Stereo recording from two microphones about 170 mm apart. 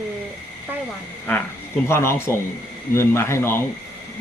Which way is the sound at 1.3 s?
10° left (ahead or behind).